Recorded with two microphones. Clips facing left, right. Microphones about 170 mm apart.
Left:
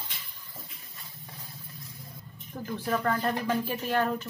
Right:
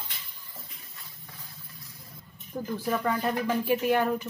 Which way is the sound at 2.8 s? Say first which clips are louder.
Even; 5° right (ahead or behind).